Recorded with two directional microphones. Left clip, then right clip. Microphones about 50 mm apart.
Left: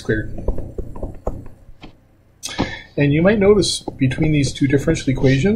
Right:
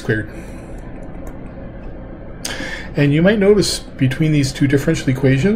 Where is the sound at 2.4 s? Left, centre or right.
Centre.